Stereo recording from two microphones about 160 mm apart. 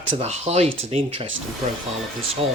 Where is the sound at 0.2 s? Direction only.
40° right (ahead or behind).